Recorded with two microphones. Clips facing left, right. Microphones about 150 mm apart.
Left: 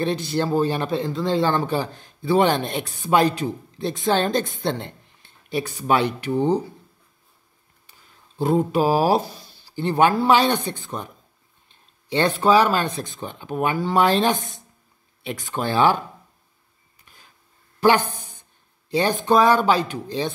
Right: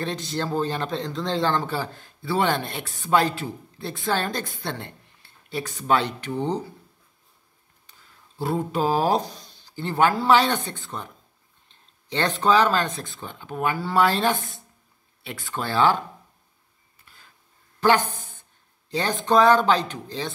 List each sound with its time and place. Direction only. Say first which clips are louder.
0.0 s speech: left 5 dB; 10° left (ahead or behind)
8.4 s speech: left 6 dB; 20° left (ahead or behind)
8.8 s speech: left 3 dB; 10° left (ahead or behind)
12.1 s speech: left 3 dB; 10° left (ahead or behind)
17.0 s a sound: left 1 dB; 15° left (ahead or behind)
17.7 s a woman's voice: left 2 dB; 10° left (ahead or behind)